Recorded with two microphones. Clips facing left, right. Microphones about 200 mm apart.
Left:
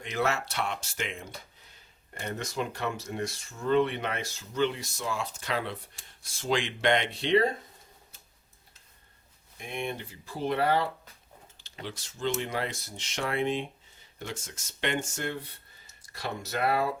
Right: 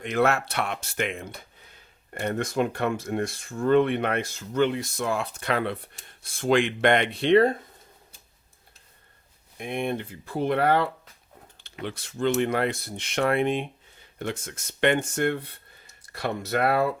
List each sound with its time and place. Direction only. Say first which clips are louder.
0.0 s speech: right 6 dB; 55° right (ahead or behind)
9.6 s speech: right 6 dB; 55° right (ahead or behind)